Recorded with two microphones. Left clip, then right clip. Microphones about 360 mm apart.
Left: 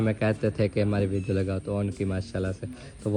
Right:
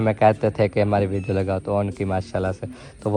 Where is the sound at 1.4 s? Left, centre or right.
Right.